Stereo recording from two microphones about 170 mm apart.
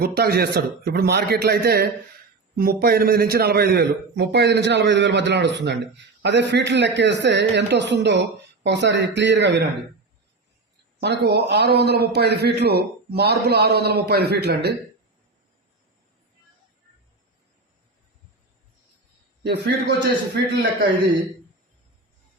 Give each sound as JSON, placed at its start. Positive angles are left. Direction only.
{"t": 0.0, "sound": "a man's voice", "side_deg": -65}
{"t": 2.6, "sound": "a man's voice", "side_deg": -60}
{"t": 11.0, "sound": "a man's voice", "side_deg": -75}
{"t": 19.4, "sound": "a man's voice", "side_deg": -75}